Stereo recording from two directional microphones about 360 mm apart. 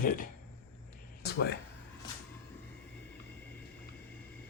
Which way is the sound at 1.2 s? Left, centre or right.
Left.